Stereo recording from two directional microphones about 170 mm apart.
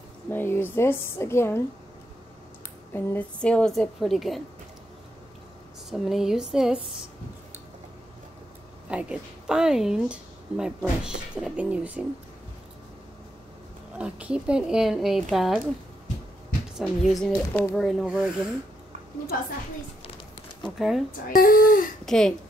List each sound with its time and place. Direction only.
0.3 s a woman's voice: 10° left (ahead or behind)
2.9 s a woman's voice: 10° left (ahead or behind)
5.9 s a woman's voice: centre (ahead or behind)
8.8 s a woman's voice: 5° right (ahead or behind)
13.9 s a woman's voice: 5° right (ahead or behind)
16.7 s a woman's voice: centre (ahead or behind)
20.6 s a woman's voice: centre (ahead or behind)
21.3 s speech: 55° left (ahead or behind)
22.0 s a woman's voice: 5° left (ahead or behind)